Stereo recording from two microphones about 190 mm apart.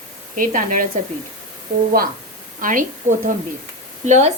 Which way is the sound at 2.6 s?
45° right (ahead or behind).